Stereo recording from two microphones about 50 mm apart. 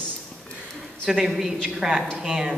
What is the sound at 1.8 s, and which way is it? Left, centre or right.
Speech, centre.